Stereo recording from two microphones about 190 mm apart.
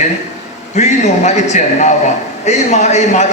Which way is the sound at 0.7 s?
35° left (ahead or behind).